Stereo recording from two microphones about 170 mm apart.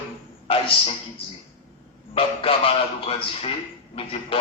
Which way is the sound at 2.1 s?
35° left (ahead or behind).